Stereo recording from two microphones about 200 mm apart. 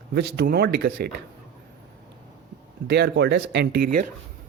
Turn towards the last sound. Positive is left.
turn(degrees=-45)  # may be behind; listen again after turning